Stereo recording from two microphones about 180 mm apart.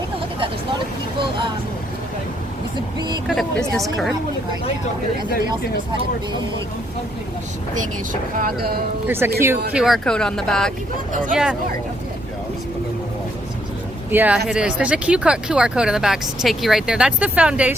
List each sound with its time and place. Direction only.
3.2 s speech: centre (ahead or behind)
8.4 s speech: 55° right (ahead or behind)
9.0 s speech: 10° right (ahead or behind)
9.7 s speech: centre (ahead or behind)
14.1 s speech: 10° right (ahead or behind)